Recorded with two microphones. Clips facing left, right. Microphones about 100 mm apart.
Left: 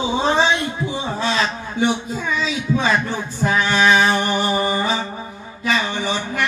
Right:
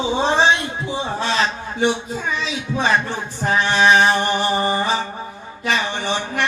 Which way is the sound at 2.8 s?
30° right (ahead or behind).